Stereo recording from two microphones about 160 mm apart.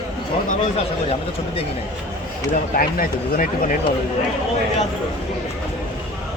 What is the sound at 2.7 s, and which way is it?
Speech, 65° left (ahead or behind).